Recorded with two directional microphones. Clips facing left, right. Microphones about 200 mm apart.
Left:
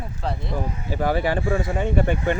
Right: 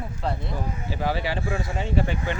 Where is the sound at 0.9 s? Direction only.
50° left (ahead or behind).